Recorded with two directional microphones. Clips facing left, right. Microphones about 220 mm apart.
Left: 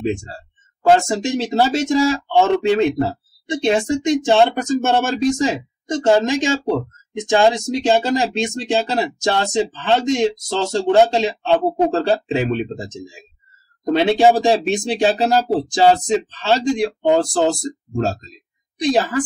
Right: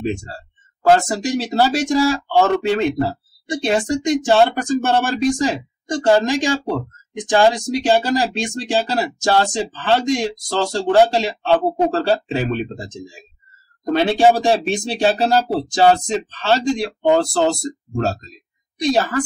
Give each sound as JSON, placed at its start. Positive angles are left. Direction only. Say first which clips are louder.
{"t": 0.8, "sound": "speech", "louder": "even", "side_deg": 20}